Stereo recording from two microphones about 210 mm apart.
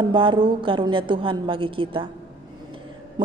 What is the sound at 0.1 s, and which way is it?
A woman's voice, 20° right (ahead or behind).